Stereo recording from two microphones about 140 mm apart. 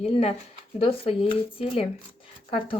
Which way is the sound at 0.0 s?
45° left (ahead or behind).